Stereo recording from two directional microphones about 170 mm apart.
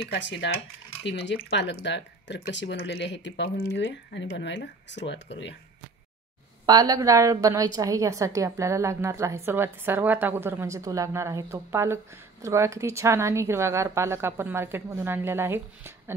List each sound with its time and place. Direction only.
0.1 s speech: 90° left
6.6 s a woman's voice: 25° right (ahead or behind)